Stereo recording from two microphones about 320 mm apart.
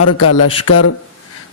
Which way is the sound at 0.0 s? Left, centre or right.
Left.